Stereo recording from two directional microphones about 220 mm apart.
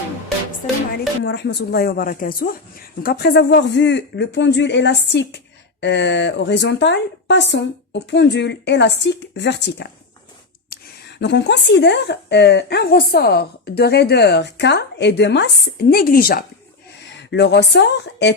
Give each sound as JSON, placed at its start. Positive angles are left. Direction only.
{"t": 1.2, "sound": "a woman's voice", "side_deg": 50}
{"t": 10.7, "sound": "a sound", "side_deg": 45}
{"t": 11.2, "sound": "a woman's voice", "side_deg": 50}